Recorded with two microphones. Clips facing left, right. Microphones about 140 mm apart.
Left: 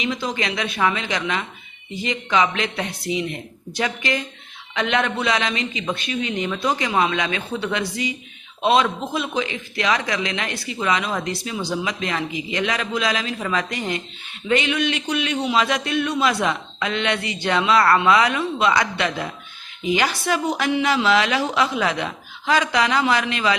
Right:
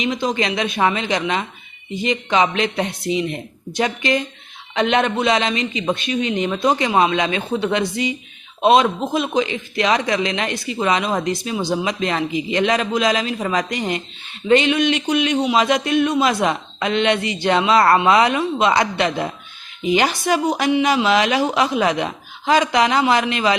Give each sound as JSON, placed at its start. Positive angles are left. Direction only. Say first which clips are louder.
{"t": 0.0, "sound": "speech", "louder": "right 4 dB", "side_deg": -20}